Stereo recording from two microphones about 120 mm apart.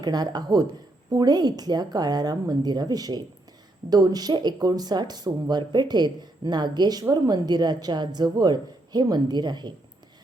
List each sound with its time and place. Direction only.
0.0 s speech: 35° right (ahead or behind)